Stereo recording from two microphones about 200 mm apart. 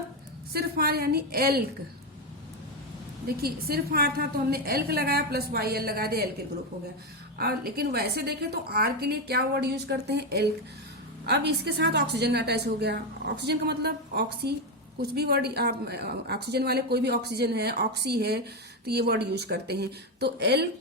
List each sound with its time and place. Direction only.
0.5 s speech: 50° right (ahead or behind)
3.2 s speech: 50° right (ahead or behind)
7.3 s a woman's voice: 50° right (ahead or behind)